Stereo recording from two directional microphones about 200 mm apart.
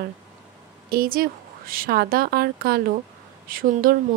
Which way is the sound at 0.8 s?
45° right (ahead or behind).